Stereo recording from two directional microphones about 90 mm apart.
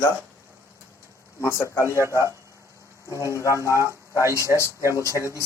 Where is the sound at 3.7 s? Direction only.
30° right (ahead or behind).